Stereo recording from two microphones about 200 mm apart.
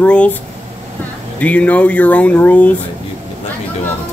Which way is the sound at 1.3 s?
5° left (ahead or behind).